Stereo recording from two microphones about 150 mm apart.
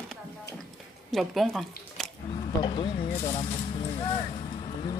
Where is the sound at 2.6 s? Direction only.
35° left (ahead or behind).